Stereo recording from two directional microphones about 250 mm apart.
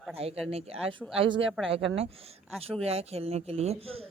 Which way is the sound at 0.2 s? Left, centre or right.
Right.